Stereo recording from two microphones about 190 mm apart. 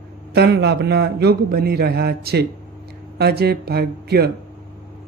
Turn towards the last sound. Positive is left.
turn(degrees=-55)  # may be behind; listen again after turning